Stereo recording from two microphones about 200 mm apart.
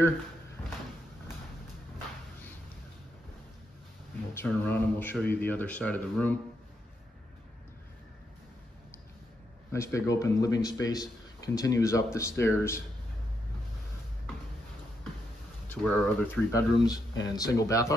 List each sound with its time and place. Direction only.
4.5 s a man's voice: 10° left (ahead or behind)
9.7 s a man's voice: 15° left (ahead or behind)
15.7 s speech: centre (ahead or behind)
16.5 s a man's voice: 20° left (ahead or behind)